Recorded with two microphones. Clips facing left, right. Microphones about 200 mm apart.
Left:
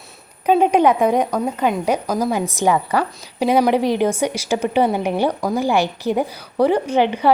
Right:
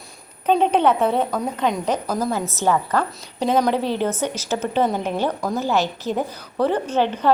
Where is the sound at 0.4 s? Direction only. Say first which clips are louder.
Left 3 dB; 10° left (ahead or behind).